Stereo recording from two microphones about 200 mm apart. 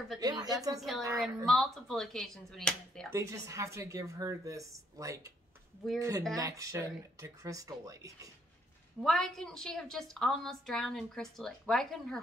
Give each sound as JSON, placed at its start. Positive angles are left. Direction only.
{"t": 0.2, "sound": "a sound", "side_deg": -20}
{"t": 0.7, "sound": "a woman's voice", "side_deg": 0}
{"t": 3.1, "sound": "speech", "side_deg": -15}
{"t": 9.0, "sound": "a woman's voice", "side_deg": 0}